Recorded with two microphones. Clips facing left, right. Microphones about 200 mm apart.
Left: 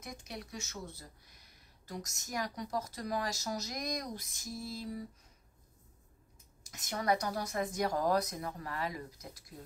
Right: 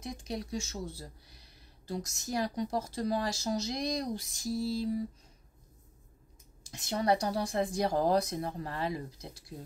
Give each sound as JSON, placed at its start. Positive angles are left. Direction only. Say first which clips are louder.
{"t": 0.0, "sound": "speech", "louder": "right 7 dB", "side_deg": -30}
{"t": 6.6, "sound": "speech", "louder": "right 5 dB", "side_deg": -30}